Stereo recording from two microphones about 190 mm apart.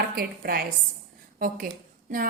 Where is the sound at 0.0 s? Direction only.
50° right (ahead or behind).